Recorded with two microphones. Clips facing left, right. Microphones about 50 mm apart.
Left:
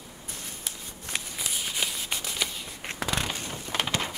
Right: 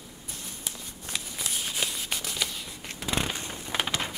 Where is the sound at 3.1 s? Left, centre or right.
Centre.